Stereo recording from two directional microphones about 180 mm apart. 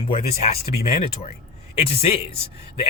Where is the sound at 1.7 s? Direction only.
35° left (ahead or behind).